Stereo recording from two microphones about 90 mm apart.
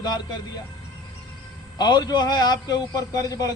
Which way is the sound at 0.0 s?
50° left (ahead or behind).